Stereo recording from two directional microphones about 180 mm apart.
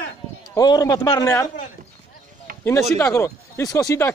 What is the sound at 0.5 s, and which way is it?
Speech, 20° left (ahead or behind).